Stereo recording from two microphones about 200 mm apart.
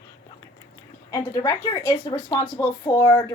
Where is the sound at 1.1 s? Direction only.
15° left (ahead or behind).